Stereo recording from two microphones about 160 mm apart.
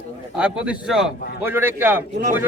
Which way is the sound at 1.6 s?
15° right (ahead or behind).